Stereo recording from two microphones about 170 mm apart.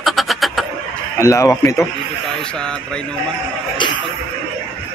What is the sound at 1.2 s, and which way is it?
Speech, 15° left (ahead or behind).